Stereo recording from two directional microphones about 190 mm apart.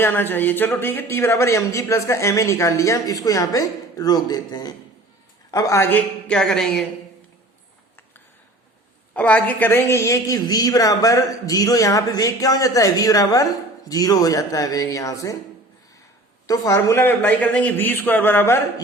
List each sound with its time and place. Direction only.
0.0 s a woman's voice: 10° left (ahead or behind)
9.1 s a woman's voice: 5° left (ahead or behind)
16.5 s a woman's voice: 15° left (ahead or behind)